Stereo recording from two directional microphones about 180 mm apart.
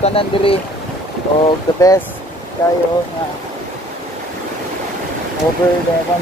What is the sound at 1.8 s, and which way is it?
Speech, 20° left (ahead or behind).